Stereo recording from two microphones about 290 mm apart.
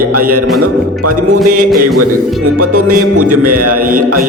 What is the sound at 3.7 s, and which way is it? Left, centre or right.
Speech, right.